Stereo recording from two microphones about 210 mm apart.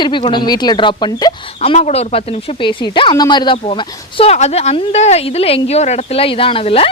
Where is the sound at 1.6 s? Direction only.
30° left (ahead or behind).